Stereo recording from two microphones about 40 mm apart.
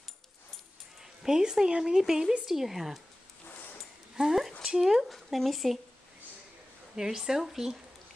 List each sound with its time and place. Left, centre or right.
1.2 s speech: centre
4.4 s a sound: centre
4.6 s speech: centre
5.1 s speech: centre
7.0 s speech: centre